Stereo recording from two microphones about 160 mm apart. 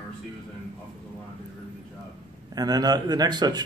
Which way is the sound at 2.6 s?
25° right (ahead or behind).